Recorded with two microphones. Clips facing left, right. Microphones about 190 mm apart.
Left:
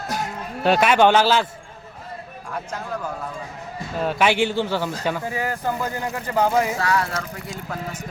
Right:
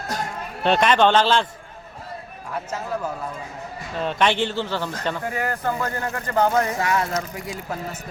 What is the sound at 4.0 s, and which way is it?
A man's voice, 5° left (ahead or behind).